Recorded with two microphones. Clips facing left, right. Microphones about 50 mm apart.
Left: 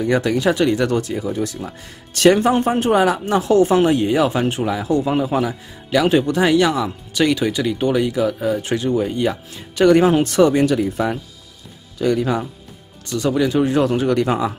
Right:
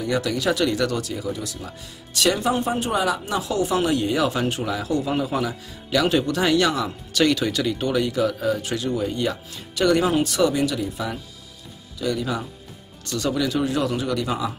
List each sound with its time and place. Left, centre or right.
0.0 s a man's voice: left; by 8.5 s centre
8.5 s speech: left
9.8 s speech: left